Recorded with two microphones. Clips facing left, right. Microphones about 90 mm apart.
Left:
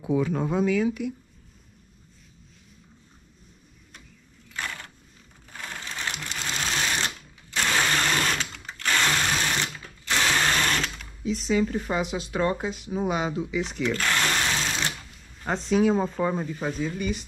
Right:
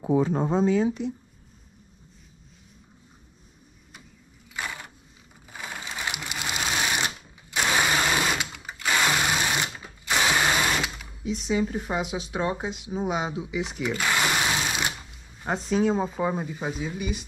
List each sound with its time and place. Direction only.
0.2 s speech: 30° right (ahead or behind)
4.5 s a sound: 10° right (ahead or behind)
5.5 s sewing machine: 10° right (ahead or behind)